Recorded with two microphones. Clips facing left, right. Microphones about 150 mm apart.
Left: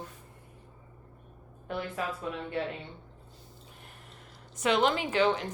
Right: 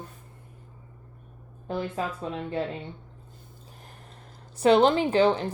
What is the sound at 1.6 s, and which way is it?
Speech, 30° right (ahead or behind).